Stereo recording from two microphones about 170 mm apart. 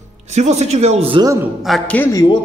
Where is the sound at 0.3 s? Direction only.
40° right (ahead or behind).